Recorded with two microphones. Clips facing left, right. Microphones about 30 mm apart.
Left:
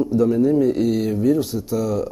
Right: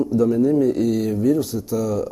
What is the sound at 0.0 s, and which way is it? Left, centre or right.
Speech, left.